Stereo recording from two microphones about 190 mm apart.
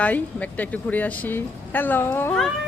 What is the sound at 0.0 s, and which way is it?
A woman's voice, 5° left (ahead or behind).